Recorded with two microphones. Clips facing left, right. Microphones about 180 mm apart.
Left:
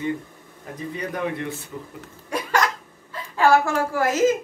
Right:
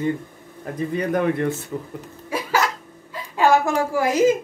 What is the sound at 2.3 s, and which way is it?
Hiccup, 5° right (ahead or behind).